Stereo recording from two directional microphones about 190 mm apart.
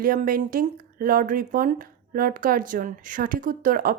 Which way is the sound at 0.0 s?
50° right (ahead or behind).